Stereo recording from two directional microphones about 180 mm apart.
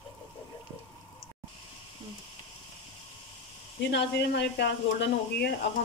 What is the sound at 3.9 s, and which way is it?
Speech, 70° left (ahead or behind).